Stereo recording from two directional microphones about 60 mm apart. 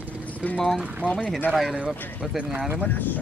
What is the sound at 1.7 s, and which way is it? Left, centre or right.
Speech, centre.